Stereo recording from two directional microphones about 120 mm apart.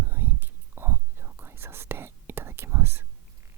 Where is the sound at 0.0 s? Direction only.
20° right (ahead or behind).